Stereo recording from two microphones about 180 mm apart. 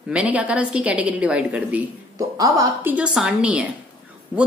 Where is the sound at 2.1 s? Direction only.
20° right (ahead or behind).